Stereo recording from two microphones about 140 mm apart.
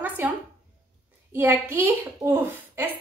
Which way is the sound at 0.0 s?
15° right (ahead or behind).